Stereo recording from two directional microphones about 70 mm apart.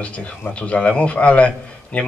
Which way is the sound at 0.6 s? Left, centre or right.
Centre.